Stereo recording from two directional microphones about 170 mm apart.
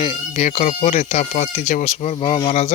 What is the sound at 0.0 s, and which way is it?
Speech, 35° left (ahead or behind).